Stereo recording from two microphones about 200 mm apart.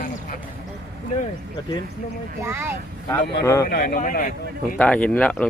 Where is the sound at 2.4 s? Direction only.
15° right (ahead or behind).